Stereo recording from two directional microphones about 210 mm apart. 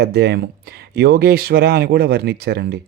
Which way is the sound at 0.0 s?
50° right (ahead or behind).